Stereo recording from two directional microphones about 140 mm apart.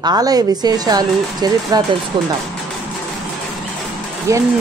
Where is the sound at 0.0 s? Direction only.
25° right (ahead or behind).